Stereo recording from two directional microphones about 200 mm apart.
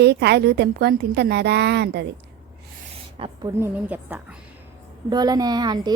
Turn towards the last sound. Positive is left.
turn(degrees=-20)  # may be behind; listen again after turning